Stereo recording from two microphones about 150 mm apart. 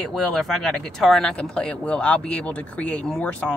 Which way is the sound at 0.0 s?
Centre (ahead or behind).